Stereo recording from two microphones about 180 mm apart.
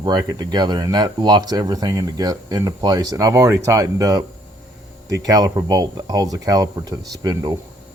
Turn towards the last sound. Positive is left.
turn(degrees=-20)  # may be behind; listen again after turning